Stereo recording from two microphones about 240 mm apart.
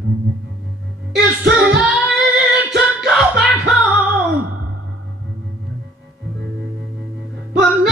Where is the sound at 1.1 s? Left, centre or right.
Right.